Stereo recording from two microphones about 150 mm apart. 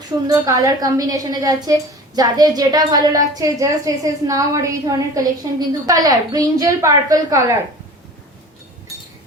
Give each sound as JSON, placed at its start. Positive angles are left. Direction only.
{"t": 0.3, "sound": "a woman's voice", "side_deg": -25}